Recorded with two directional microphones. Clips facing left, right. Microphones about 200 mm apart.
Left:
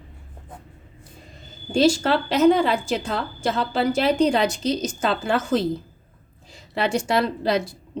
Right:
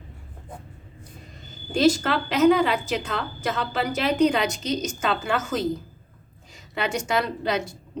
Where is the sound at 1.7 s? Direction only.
30° left (ahead or behind).